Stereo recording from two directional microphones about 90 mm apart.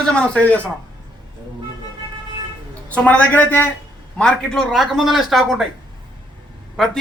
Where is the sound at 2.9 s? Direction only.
15° left (ahead or behind).